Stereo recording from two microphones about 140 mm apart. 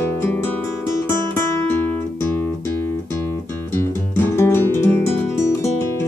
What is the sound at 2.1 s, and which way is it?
Music, 15° left (ahead or behind).